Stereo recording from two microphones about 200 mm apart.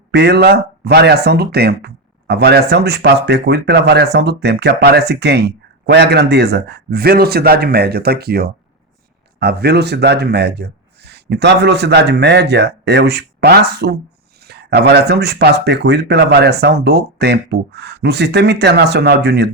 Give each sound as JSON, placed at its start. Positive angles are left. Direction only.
{"t": 0.1, "sound": "speech", "side_deg": -55}